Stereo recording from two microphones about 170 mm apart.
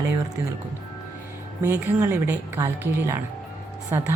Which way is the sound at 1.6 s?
15° right (ahead or behind).